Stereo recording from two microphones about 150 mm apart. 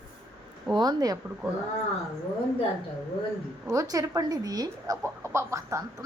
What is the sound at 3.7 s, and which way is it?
Speech, 20° right (ahead or behind).